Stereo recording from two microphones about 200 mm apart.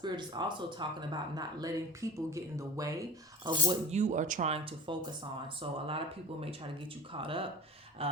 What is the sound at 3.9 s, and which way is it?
Speech, 35° right (ahead or behind).